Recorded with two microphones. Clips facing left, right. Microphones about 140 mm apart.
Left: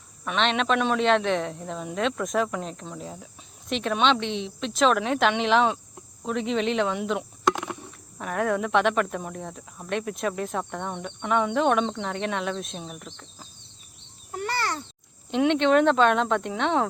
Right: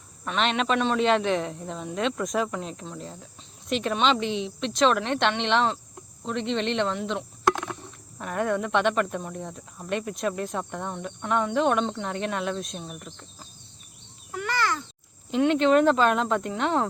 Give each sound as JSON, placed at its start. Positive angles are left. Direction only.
{"t": 0.3, "sound": "speech", "side_deg": 0}
{"t": 6.2, "sound": "cricket", "side_deg": 5}
{"t": 7.9, "sound": "speech", "side_deg": 0}
{"t": 14.3, "sound": "a sound", "side_deg": 35}
{"t": 15.3, "sound": "speech", "side_deg": 0}